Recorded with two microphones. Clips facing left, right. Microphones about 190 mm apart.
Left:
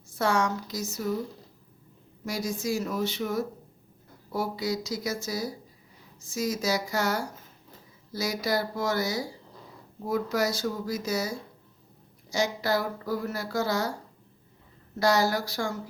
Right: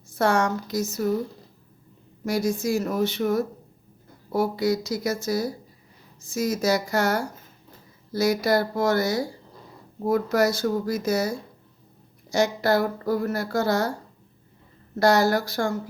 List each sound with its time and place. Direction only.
0.2 s a woman's voice: 60° right (ahead or behind)
2.2 s a woman's voice: 55° right (ahead or behind)
14.9 s a woman's voice: 55° right (ahead or behind)